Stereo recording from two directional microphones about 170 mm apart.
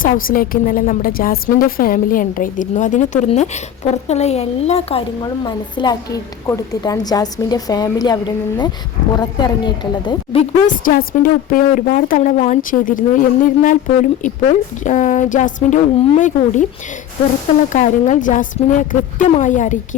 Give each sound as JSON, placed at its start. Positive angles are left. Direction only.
{"t": 0.0, "sound": "a woman's voice", "side_deg": 55}
{"t": 10.7, "sound": "a woman's voice", "side_deg": 55}
{"t": 17.7, "sound": "a woman's voice", "side_deg": 45}